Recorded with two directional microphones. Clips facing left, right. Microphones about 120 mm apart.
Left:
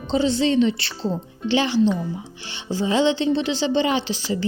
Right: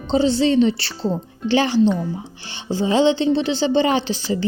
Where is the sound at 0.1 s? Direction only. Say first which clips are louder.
Right 3 dB; 30° right (ahead or behind).